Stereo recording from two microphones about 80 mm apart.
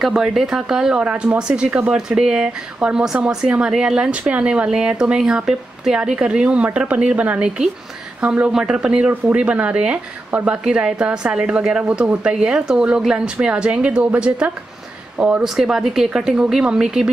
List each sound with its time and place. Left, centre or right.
0.0 s speech: centre
15.4 s speech: centre